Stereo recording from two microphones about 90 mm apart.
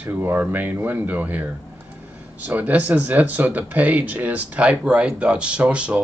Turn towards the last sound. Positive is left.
turn(degrees=-15)  # may be behind; listen again after turning